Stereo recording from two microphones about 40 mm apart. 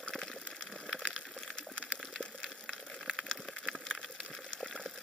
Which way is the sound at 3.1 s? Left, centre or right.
Centre.